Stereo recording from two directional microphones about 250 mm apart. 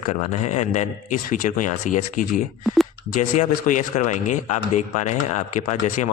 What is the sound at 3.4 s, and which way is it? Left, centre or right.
A man's voice, left.